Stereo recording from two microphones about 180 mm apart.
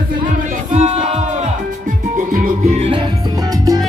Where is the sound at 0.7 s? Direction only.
40° right (ahead or behind).